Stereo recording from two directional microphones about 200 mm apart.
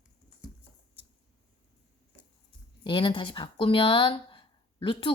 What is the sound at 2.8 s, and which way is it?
A woman's voice, 25° left (ahead or behind).